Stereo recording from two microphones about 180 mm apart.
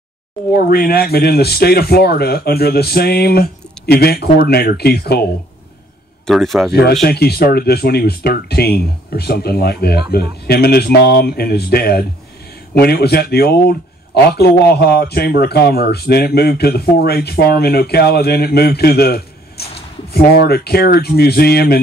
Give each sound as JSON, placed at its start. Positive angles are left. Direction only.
{"t": 0.7, "sound": "speech", "side_deg": 55}
{"t": 6.2, "sound": "speech", "side_deg": 0}
{"t": 7.0, "sound": "speech", "side_deg": 65}